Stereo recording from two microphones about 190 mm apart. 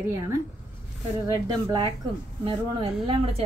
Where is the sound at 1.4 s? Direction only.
20° right (ahead or behind).